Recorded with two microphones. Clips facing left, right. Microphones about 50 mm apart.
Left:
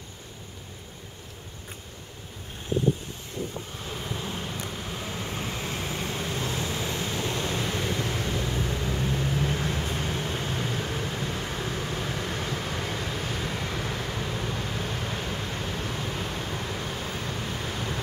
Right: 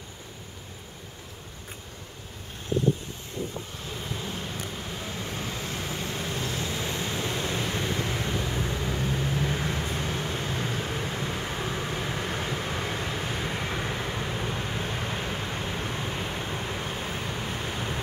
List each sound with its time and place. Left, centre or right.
4.1 s vehicle: centre
5.6 s vehicle: centre
6.9 s vehicle: centre
7.4 s waves: centre
8.2 s vehicle: centre